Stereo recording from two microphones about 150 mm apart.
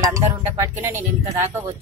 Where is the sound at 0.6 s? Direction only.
20° right (ahead or behind).